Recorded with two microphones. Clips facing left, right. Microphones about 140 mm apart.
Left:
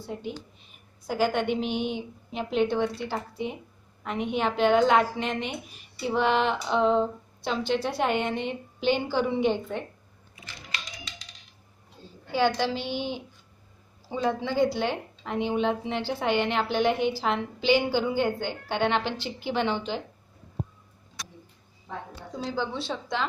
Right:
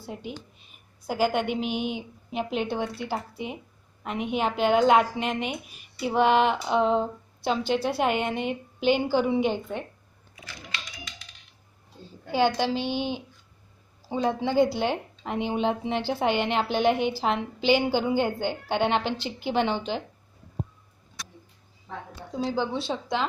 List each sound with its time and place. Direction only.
1.0 s a woman's voice: 10° right (ahead or behind)
12.3 s a woman's voice: 20° right (ahead or behind)
22.4 s a woman's voice: 15° right (ahead or behind)